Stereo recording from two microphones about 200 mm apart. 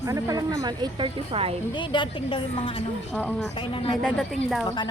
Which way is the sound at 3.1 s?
5° left (ahead or behind).